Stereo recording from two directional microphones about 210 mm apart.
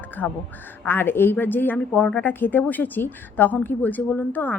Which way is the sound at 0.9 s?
10° left (ahead or behind).